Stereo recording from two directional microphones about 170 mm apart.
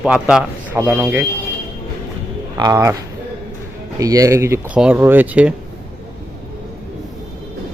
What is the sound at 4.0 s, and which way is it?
A man's voice, 20° right (ahead or behind).